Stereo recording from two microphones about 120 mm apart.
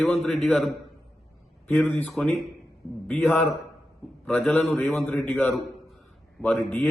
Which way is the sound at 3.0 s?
15° left (ahead or behind).